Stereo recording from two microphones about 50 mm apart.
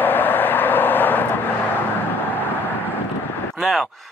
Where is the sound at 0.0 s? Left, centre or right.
Left.